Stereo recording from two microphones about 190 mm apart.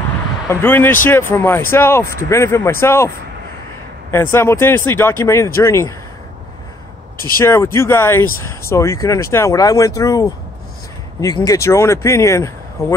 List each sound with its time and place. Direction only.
0.5 s speech: 10° left (ahead or behind)
4.1 s speech: 10° left (ahead or behind)
7.4 s speech: 15° left (ahead or behind)